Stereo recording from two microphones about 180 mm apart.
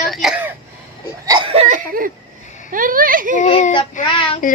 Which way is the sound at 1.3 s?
30° right (ahead or behind).